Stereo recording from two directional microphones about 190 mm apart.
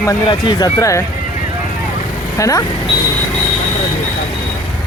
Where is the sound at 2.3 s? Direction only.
15° left (ahead or behind).